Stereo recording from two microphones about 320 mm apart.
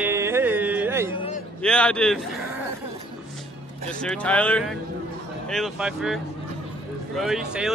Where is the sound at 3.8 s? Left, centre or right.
Centre.